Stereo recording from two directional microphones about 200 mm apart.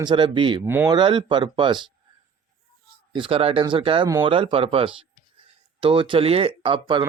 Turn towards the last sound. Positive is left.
turn(degrees=-25)  # may be behind; listen again after turning